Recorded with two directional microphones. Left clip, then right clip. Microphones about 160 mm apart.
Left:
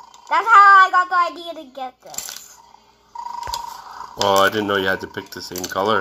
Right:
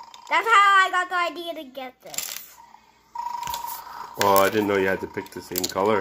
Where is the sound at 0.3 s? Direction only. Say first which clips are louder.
Left 7 dB; 75° right (ahead or behind).